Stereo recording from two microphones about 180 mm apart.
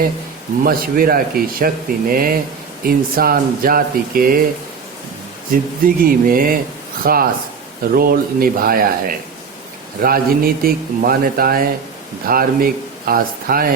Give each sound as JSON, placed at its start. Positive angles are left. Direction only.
{"t": 0.6, "sound": "speech", "side_deg": -55}
{"t": 5.8, "sound": "a man's voice", "side_deg": -50}